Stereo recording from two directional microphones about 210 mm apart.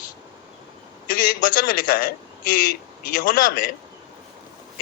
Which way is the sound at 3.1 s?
40° left (ahead or behind).